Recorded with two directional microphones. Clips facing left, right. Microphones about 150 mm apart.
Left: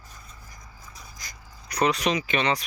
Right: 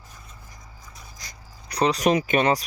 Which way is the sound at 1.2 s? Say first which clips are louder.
Even; 30° right (ahead or behind).